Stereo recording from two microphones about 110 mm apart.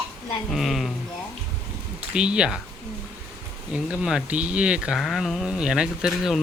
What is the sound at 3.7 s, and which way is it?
Speech, 10° right (ahead or behind).